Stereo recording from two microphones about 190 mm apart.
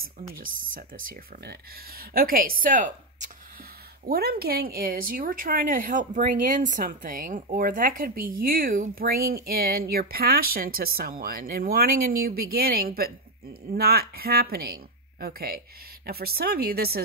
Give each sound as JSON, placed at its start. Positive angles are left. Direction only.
{"t": 0.4, "sound": "speech", "side_deg": -45}
{"t": 4.1, "sound": "speech", "side_deg": -55}